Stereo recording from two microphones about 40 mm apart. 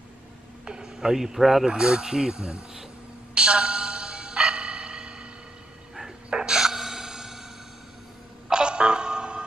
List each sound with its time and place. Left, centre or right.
0.7 s speech: centre
1.7 s speech: centre
3.3 s music: right
5.9 s gasp: centre
8.5 s music: right